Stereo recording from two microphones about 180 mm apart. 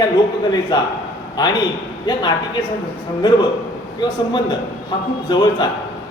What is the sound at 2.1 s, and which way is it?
Speech, 25° left (ahead or behind).